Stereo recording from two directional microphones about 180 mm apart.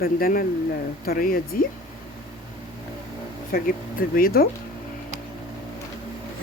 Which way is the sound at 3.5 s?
55° left (ahead or behind).